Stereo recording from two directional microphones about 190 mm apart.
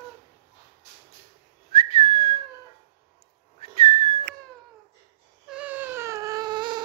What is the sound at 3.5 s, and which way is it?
Whistling, 30° left (ahead or behind).